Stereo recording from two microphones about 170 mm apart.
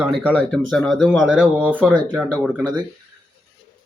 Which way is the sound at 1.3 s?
5° right (ahead or behind).